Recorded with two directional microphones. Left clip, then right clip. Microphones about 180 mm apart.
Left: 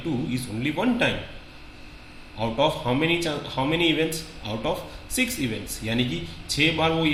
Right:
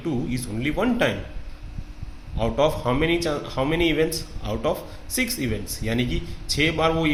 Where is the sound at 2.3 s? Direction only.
35° right (ahead or behind).